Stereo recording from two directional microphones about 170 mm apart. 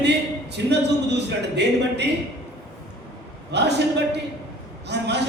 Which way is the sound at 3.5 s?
85° right.